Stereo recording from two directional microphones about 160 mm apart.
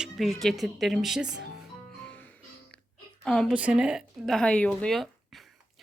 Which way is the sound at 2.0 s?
10° left (ahead or behind).